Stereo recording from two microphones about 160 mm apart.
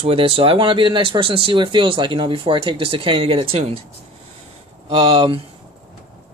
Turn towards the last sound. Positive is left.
turn(degrees=-35)  # may be behind; listen again after turning